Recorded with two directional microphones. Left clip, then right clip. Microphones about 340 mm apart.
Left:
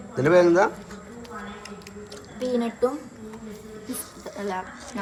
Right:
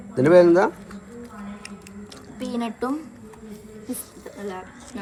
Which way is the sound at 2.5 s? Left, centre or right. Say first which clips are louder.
Left 4 dB; right.